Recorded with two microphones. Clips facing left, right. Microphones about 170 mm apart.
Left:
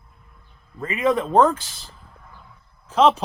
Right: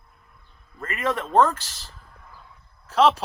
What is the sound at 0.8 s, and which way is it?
Speech, centre (ahead or behind).